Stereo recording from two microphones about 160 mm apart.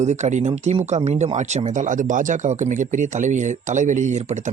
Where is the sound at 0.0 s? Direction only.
45° right (ahead or behind).